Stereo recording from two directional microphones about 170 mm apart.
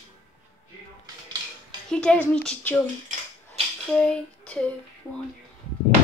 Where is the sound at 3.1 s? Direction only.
50° right (ahead or behind).